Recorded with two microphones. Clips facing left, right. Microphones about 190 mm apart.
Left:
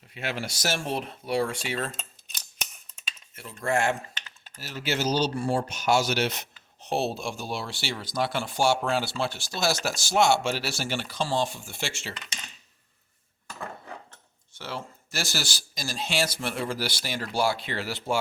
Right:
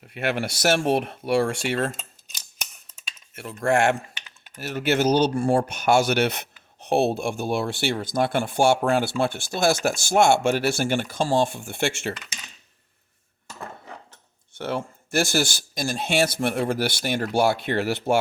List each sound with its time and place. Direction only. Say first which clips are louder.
0.0 s speech: right 7 dB; 60° right (ahead or behind)
3.7 s cutlery: right 5 dB; 75° right (ahead or behind)
4.5 s speech: right 7 dB; 60° right (ahead or behind)
14.5 s speech: right 8 dB; 55° right (ahead or behind)